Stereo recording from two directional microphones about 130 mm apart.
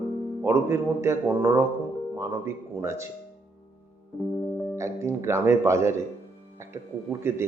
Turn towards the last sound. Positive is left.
turn(degrees=-20)  # may be behind; listen again after turning